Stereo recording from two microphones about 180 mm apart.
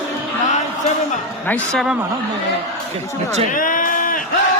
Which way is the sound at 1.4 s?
5° left (ahead or behind).